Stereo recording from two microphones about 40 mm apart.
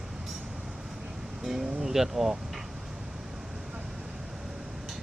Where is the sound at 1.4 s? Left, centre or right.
Centre.